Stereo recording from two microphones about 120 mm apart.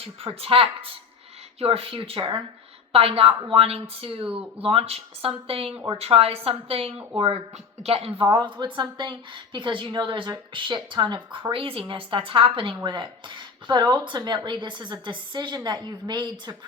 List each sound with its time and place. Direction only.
0.0 s a woman's voice: 50° right (ahead or behind)
4.2 s speech: 10° right (ahead or behind)
4.6 s a woman's voice: 50° right (ahead or behind)
8.2 s a woman's voice: 40° right (ahead or behind)